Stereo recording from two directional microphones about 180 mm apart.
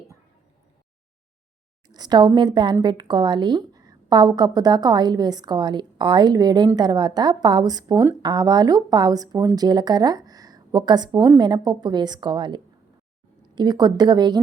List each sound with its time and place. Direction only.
1.9 s a woman's voice: 25° right (ahead or behind)